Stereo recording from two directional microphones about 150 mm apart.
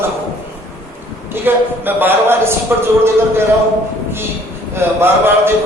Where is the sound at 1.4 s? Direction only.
15° right (ahead or behind).